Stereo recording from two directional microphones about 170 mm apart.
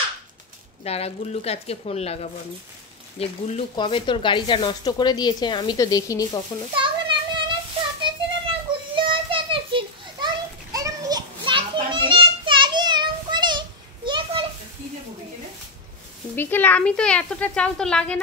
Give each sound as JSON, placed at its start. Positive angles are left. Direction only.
{"t": 0.8, "sound": "a woman's voice", "side_deg": 35}
{"t": 3.2, "sound": "speech", "side_deg": 30}
{"t": 6.7, "sound": "children playing", "side_deg": -30}
{"t": 16.3, "sound": "speech", "side_deg": 10}